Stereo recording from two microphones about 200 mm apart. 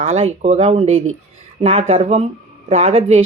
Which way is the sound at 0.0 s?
30° right (ahead or behind).